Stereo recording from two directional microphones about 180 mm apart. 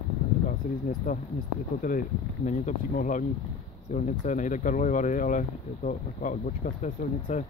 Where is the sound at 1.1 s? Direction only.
45° left (ahead or behind).